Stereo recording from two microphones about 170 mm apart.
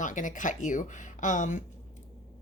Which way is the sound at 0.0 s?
50° left (ahead or behind).